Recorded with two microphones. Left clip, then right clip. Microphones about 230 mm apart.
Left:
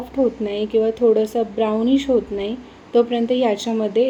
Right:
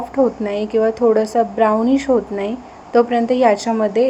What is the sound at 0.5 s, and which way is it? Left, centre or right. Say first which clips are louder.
Speech: right 1 dB; right.